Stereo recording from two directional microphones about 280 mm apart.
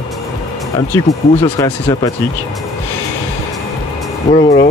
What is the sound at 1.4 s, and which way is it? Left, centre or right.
Speech, centre.